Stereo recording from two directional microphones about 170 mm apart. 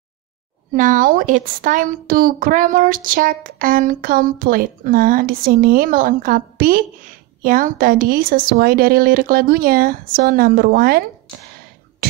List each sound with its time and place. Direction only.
0.7 s a woman's voice: 50° right (ahead or behind)